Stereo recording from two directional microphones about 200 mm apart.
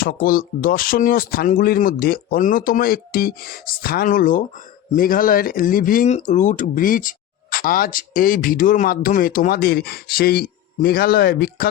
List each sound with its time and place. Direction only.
0.0 s speech: 45° left (ahead or behind)